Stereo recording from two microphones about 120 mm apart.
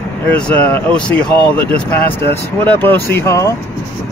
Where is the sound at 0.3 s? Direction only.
10° left (ahead or behind); by 3.5 s 25° left (ahead or behind).